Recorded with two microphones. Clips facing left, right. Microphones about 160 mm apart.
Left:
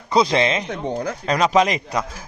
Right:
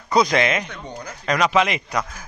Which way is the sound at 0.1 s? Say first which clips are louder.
Left 1 dB; 25° left (ahead or behind).